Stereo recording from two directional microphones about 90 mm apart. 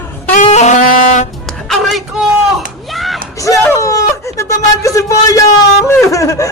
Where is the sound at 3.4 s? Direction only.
35° left (ahead or behind).